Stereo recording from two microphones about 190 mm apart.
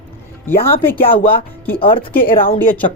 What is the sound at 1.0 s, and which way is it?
Speech, 30° left (ahead or behind).